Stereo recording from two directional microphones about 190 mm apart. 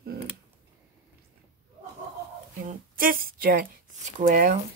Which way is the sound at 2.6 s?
45° right (ahead or behind).